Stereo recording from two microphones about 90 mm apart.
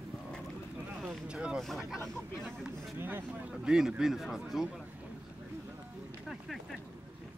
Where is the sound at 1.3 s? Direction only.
10° right (ahead or behind).